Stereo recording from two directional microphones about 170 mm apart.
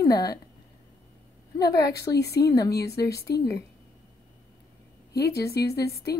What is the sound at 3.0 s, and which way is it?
Speech, 70° left (ahead or behind).